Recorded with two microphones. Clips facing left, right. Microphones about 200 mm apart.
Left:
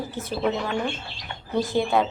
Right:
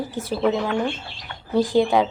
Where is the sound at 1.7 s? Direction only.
10° right (ahead or behind).